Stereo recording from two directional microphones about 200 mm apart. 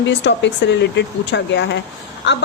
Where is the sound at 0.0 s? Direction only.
65° left (ahead or behind).